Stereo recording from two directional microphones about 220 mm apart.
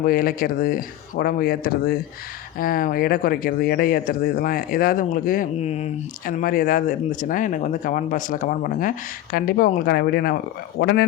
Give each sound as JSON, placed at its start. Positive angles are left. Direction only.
{"t": 0.0, "sound": "speech", "side_deg": 40}